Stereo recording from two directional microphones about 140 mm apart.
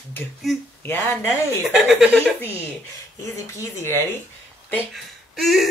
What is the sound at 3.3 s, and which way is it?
Speech, 20° left (ahead or behind).